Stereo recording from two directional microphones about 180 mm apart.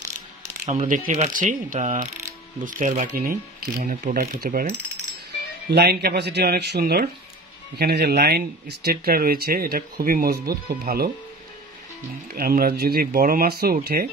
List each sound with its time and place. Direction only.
0.7 s speech: 45° right (ahead or behind)
5.7 s speech: 65° right (ahead or behind)
12.3 s speech: 55° right (ahead or behind)